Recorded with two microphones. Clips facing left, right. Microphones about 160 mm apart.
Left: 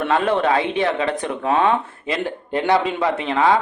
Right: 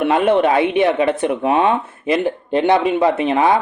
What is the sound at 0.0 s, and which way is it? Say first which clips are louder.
A woman's voice: right 4 dB; 20° right (ahead or behind).